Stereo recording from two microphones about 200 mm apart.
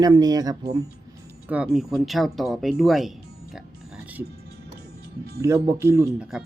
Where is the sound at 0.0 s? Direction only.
20° right (ahead or behind).